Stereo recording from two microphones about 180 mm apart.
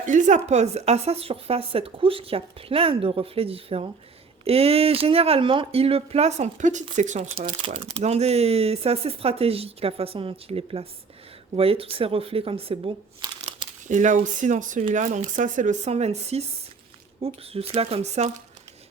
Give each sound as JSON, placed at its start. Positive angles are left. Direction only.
{"t": 0.0, "sound": "speech", "side_deg": -45}